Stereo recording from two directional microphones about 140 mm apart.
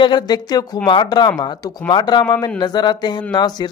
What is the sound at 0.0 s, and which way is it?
Speech, 30° left (ahead or behind).